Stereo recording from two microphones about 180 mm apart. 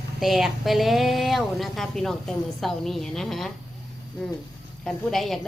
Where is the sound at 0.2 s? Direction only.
Centre (ahead or behind).